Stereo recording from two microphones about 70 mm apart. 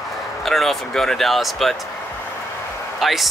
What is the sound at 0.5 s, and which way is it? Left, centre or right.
Speech, centre.